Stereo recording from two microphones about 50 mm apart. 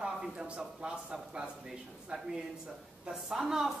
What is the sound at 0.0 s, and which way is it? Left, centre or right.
A woman's voice, centre.